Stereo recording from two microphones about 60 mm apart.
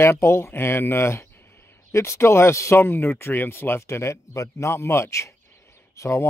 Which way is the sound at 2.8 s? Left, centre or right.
Left.